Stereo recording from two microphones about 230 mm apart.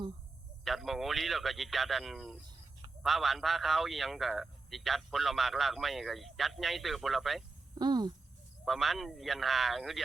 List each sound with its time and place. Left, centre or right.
0.6 s a man's voice: centre
7.8 s speech: centre
8.6 s a man's voice: centre